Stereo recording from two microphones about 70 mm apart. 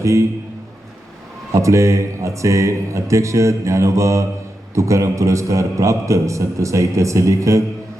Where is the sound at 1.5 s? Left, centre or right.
Right.